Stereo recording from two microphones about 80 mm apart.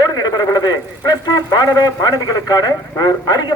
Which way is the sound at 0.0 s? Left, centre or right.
Left.